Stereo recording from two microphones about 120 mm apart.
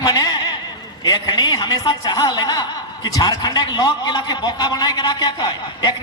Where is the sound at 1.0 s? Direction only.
35° left (ahead or behind).